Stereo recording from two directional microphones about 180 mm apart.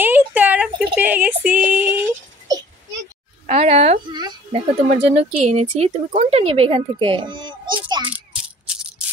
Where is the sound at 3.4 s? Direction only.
35° right (ahead or behind).